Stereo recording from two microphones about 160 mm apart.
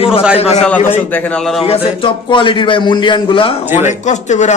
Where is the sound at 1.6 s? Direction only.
35° left (ahead or behind).